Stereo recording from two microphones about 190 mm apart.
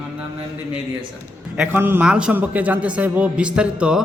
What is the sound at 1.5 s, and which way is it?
A man's voice, 5° right (ahead or behind).